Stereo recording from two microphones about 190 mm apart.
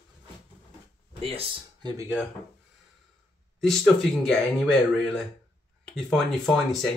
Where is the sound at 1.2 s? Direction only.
30° right (ahead or behind).